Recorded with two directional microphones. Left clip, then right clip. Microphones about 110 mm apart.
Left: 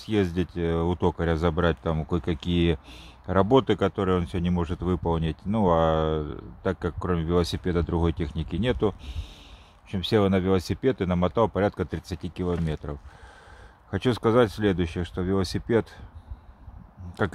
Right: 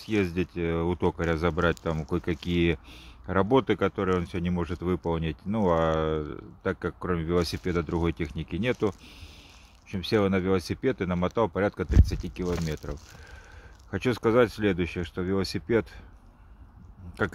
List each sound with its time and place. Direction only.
0.0 s speech: 15° left (ahead or behind)
13.8 s speech: 15° left (ahead or behind)